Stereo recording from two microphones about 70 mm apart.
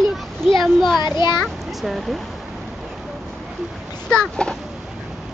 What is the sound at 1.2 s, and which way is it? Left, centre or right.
Speech, left.